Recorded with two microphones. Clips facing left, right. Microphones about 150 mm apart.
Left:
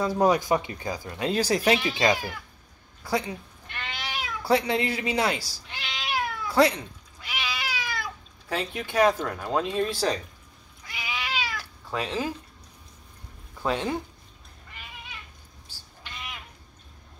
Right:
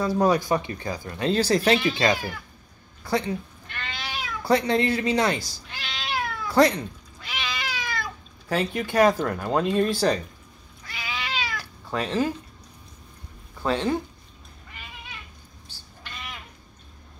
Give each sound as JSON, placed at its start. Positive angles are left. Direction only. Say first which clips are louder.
{"t": 0.0, "sound": "speech", "louder": "right 1 dB", "side_deg": 15}
{"t": 3.0, "sound": "cat", "louder": "right 3 dB", "side_deg": 10}
{"t": 4.4, "sound": "speech", "louder": "right 2 dB", "side_deg": 5}
{"t": 5.7, "sound": "cat", "louder": "even", "side_deg": 20}
{"t": 10.8, "sound": "cat", "louder": "right 1 dB", "side_deg": 15}
{"t": 13.6, "sound": "speech", "louder": "right 3 dB", "side_deg": 10}